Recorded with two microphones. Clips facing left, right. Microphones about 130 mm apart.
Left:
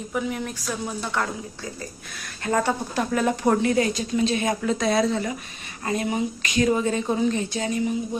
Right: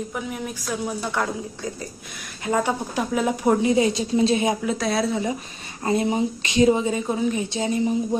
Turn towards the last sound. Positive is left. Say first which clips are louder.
# right 2 dB
turn(degrees=-25)  # may be behind; listen again after turning